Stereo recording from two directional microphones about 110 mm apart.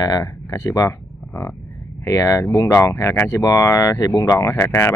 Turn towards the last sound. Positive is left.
turn(degrees=25)  # may be behind; listen again after turning